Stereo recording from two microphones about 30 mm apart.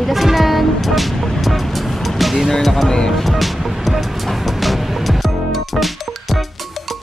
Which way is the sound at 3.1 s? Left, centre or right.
Centre.